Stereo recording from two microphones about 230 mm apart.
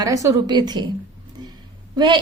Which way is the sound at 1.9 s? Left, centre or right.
Centre.